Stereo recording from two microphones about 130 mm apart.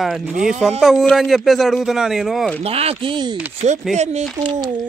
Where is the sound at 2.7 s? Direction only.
50° right (ahead or behind).